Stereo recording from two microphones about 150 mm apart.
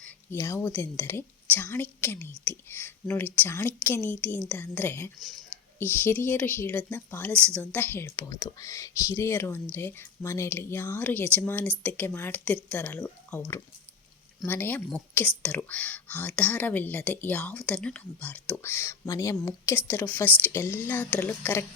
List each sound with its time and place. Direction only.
0.3 s a woman's voice: 15° left (ahead or behind)